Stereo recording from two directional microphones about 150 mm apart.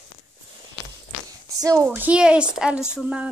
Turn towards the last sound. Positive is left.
turn(degrees=-5)  # may be behind; listen again after turning